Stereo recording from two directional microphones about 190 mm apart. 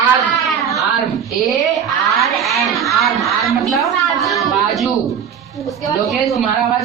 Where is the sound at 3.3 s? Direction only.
Centre (ahead or behind).